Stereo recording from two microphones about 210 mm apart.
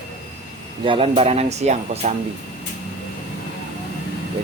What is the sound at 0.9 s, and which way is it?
Speech, 25° right (ahead or behind).